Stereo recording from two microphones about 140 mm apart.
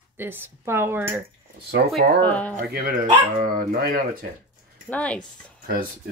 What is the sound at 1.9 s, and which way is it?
Speech, 10° left (ahead or behind).